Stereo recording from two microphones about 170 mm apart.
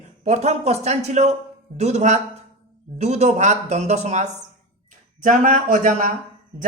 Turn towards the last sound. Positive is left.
turn(degrees=-50)  # may be behind; listen again after turning